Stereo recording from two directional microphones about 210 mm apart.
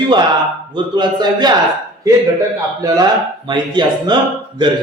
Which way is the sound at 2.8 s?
15° right (ahead or behind).